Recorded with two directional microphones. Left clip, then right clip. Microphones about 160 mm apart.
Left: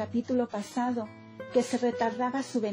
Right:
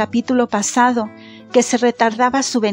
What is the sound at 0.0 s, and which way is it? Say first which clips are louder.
A woman's voice: right 12 dB; 50° right (ahead or behind).